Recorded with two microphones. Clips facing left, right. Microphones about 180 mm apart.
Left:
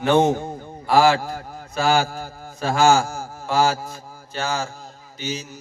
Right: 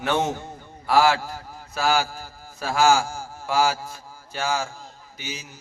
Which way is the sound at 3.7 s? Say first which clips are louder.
Left 4 dB; 40° left (ahead or behind).